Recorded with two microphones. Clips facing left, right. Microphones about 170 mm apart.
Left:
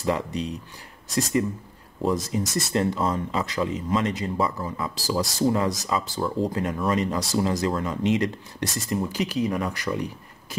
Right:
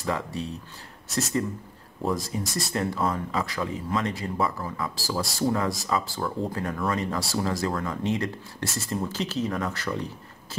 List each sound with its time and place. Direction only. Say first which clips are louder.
0.0 s speech: left 4 dB; 20° left (ahead or behind)
2.0 s speech: left 3 dB; 20° left (ahead or behind)